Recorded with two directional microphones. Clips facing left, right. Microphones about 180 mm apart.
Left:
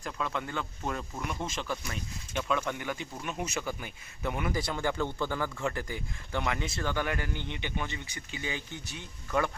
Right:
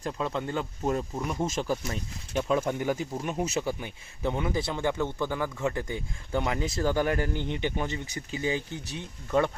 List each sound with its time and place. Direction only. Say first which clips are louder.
0.0 s speech: right 4 dB; 30° right (ahead or behind)